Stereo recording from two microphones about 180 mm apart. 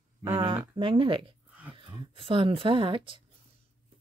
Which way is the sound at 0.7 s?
30° right (ahead or behind).